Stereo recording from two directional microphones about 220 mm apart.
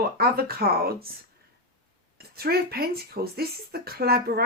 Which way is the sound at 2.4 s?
45° right (ahead or behind).